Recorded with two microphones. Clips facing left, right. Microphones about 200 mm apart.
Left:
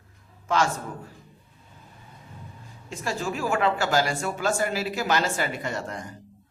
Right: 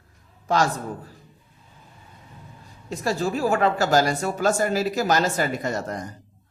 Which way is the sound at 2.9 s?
40° right (ahead or behind).